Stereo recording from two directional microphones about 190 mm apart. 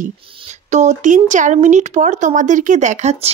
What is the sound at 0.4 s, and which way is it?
Speech, 40° right (ahead or behind).